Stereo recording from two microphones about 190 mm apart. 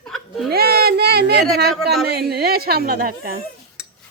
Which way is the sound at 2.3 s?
55° right (ahead or behind).